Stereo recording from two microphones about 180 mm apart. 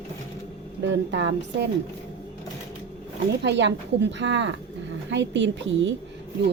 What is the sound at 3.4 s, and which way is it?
Speech, 80° right.